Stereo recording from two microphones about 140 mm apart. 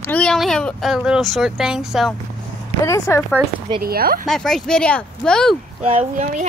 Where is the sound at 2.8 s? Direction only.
20° left (ahead or behind).